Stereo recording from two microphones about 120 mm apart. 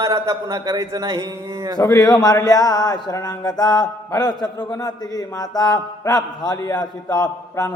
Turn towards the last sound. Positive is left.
turn(degrees=30)  # may be behind; listen again after turning